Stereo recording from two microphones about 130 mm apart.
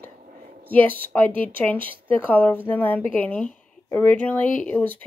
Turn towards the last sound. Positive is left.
turn(degrees=15)  # may be behind; listen again after turning